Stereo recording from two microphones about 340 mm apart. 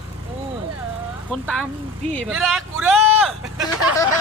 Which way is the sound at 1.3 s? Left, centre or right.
Centre.